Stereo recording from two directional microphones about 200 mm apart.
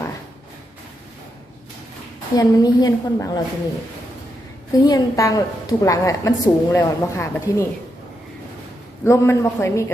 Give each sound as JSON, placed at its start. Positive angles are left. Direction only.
{"t": 2.3, "sound": "a woman's voice", "side_deg": 20}
{"t": 4.7, "sound": "a woman's voice", "side_deg": 15}
{"t": 9.0, "sound": "a woman's voice", "side_deg": 15}